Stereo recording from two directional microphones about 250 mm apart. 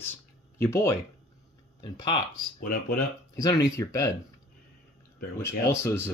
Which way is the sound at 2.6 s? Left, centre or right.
Left.